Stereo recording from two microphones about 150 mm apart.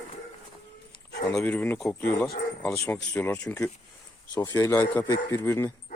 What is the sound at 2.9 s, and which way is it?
Speech, 10° left (ahead or behind).